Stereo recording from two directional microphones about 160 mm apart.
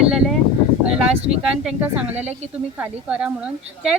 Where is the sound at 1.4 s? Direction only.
5° right (ahead or behind).